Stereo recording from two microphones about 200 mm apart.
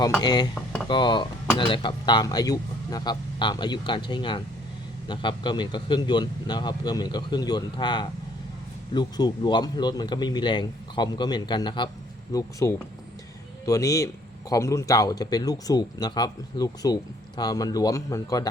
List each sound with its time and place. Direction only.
0.2 s speech: 20° left (ahead or behind)